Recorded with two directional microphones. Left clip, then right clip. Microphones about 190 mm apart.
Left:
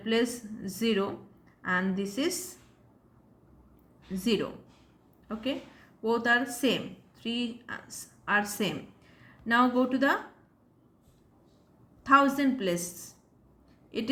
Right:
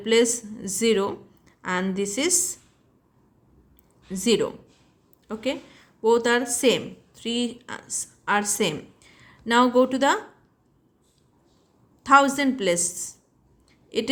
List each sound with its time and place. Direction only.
0.0 s speech: 45° right (ahead or behind)
4.1 s a woman's voice: 45° right (ahead or behind)
12.0 s a woman's voice: 40° right (ahead or behind)